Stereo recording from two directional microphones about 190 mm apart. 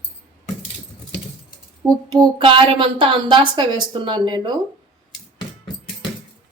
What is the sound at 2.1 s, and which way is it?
A woman's voice, 25° right (ahead or behind).